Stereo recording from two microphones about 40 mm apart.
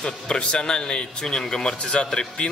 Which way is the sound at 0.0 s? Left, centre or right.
Left.